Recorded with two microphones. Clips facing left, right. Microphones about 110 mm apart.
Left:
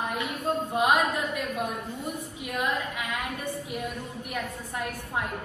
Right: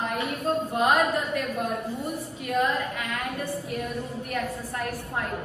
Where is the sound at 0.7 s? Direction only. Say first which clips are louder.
Right 1 dB; 15° left (ahead or behind).